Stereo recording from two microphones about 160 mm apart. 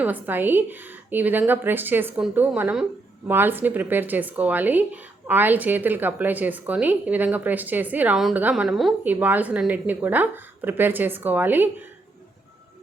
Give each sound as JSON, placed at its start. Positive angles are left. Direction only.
{"t": 0.0, "sound": "a woman's voice", "side_deg": -10}